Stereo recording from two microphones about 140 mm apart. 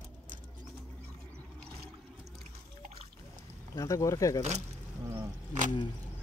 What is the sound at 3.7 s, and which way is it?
Speech, 20° left (ahead or behind).